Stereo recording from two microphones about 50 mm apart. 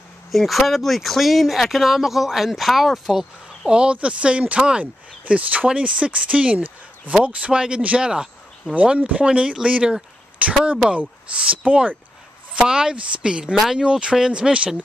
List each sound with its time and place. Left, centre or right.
0.3 s speech: centre
3.7 s speech: right
5.2 s speech: right